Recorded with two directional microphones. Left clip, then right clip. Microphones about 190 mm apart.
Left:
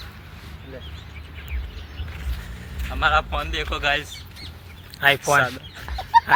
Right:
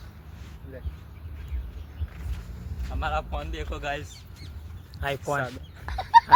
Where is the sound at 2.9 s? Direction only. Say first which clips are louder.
Left 10 dB; 5° left (ahead or behind).